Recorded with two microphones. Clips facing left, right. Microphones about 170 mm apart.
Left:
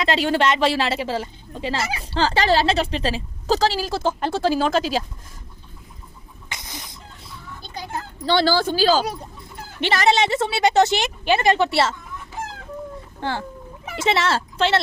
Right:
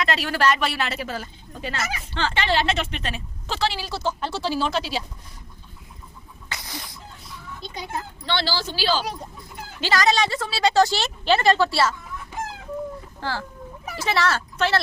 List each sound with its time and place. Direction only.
0.0 s a woman's voice: 25° left (ahead or behind); by 5.0 s 45° left (ahead or behind)
6.5 s chicken: 20° left (ahead or behind)
8.2 s speech: 40° left (ahead or behind)
9.8 s a woman's voice: 25° left (ahead or behind)
13.1 s a woman's voice: 20° left (ahead or behind)